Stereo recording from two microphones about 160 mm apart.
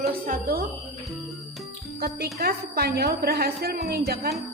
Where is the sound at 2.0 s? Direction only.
75° right (ahead or behind).